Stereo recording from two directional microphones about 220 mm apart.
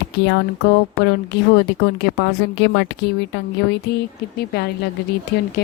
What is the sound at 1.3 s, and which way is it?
Speech, 50° left (ahead or behind).